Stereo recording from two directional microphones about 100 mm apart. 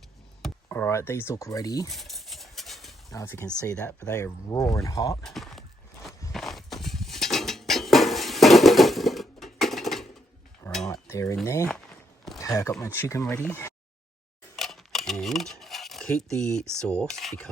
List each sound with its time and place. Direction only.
0.7 s speech: 25° left (ahead or behind)
1.9 s a sound: centre (ahead or behind)
3.1 s speech: 30° left (ahead or behind)
3.8 s speech: 15° left (ahead or behind)
4.1 s speech: 30° left (ahead or behind)
5.2 s a sound: centre (ahead or behind)
10.6 s cutlery: 35° left (ahead or behind)
11.1 s speech: 30° left (ahead or behind)
11.4 s a sound: 25° left (ahead or behind)
12.9 s speech: 25° left (ahead or behind)
14.5 s a sound: 5° left (ahead or behind)
16.8 s speech: 10° left (ahead or behind)